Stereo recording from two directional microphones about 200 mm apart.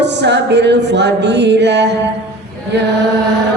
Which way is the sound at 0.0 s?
60° right (ahead or behind).